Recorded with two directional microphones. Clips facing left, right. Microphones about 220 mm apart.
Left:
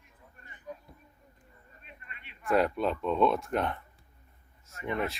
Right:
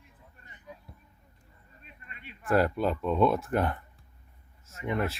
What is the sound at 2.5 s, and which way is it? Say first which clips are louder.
Speech: right 1 dB; centre (ahead or behind).